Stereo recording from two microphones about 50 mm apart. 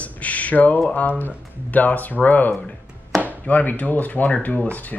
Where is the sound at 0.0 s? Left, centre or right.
Left.